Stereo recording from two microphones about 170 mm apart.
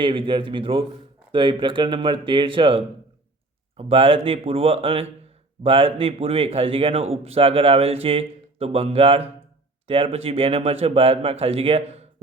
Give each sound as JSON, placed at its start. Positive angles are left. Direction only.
{"t": 0.0, "sound": "speech", "side_deg": -30}